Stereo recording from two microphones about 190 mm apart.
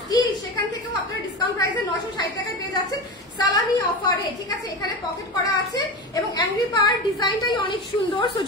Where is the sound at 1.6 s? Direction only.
20° left (ahead or behind).